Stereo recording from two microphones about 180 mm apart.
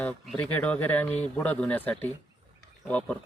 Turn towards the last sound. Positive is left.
turn(degrees=5)  # may be behind; listen again after turning